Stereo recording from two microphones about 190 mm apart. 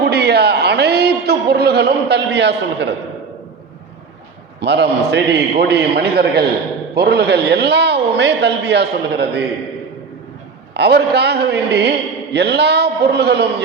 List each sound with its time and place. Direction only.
0.0 s a sound: 60° right (ahead or behind)
4.6 s a man's voice: 65° right (ahead or behind)
10.8 s a man's voice: 60° right (ahead or behind)